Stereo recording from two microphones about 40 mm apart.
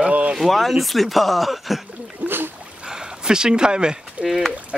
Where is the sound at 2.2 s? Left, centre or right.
Right.